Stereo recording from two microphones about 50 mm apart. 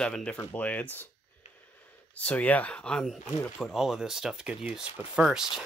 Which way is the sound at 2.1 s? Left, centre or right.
Left.